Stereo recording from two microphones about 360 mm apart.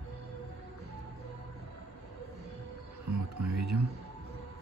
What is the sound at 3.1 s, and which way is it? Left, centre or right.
Music, right.